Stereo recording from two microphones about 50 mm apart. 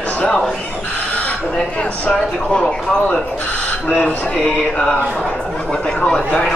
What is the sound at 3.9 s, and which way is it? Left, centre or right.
Speech, left.